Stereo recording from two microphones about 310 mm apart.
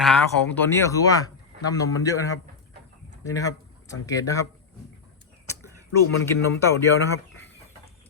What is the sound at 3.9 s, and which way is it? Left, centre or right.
Speech, centre.